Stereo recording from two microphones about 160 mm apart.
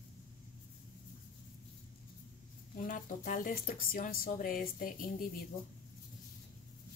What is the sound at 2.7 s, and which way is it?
Speech, 55° left (ahead or behind).